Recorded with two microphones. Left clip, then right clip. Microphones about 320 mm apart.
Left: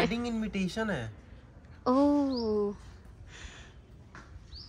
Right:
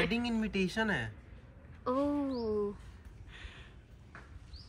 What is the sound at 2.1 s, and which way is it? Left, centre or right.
Speech, centre.